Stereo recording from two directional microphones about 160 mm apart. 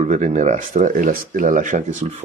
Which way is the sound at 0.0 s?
45° right (ahead or behind).